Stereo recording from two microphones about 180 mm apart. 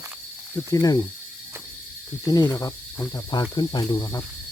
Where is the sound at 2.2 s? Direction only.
20° left (ahead or behind).